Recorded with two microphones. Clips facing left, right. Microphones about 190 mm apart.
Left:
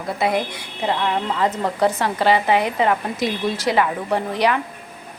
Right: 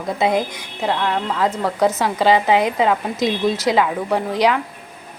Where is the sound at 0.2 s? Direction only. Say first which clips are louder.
Right 2 dB; 20° right (ahead or behind).